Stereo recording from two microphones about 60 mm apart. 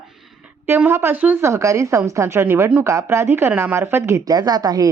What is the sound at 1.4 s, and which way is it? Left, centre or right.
A woman's voice, right.